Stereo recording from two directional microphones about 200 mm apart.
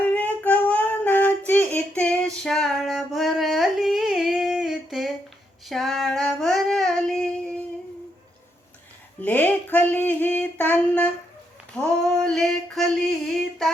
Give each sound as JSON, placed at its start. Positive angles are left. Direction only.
{"t": 0.1, "sound": "child singing", "side_deg": 10}
{"t": 9.2, "sound": "speech", "side_deg": 10}
{"t": 10.1, "sound": "a sound", "side_deg": 10}
{"t": 11.8, "sound": "female singing", "side_deg": 0}